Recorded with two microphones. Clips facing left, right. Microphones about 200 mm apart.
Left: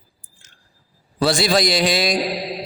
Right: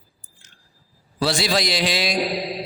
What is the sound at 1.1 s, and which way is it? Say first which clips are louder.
Speech: left 4 dB; 50° left (ahead or behind).